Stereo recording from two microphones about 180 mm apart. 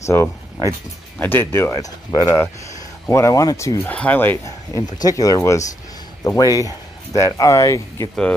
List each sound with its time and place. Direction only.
0.0 s speech: 15° left (ahead or behind)